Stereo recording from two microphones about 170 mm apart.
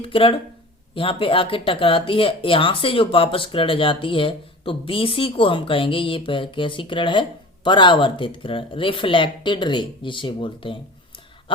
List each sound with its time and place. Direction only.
0.0 s speech: 30° left (ahead or behind)